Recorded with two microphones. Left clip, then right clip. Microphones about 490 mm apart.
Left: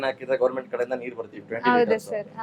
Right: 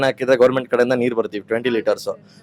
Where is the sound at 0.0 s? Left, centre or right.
Right.